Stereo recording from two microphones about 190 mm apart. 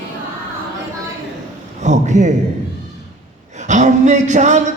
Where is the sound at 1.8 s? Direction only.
40° right (ahead or behind).